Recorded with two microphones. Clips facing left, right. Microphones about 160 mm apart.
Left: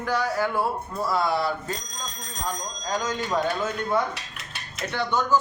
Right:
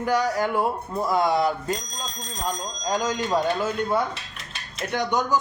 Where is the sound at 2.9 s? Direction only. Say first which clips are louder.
Right 2 dB; 10° right (ahead or behind).